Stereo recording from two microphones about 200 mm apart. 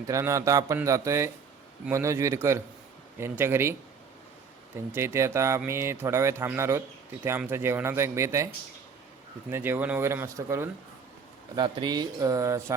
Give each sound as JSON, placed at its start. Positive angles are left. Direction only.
{"t": 0.1, "sound": "speech", "side_deg": -15}
{"t": 4.9, "sound": "speech", "side_deg": -15}
{"t": 9.5, "sound": "speech", "side_deg": -10}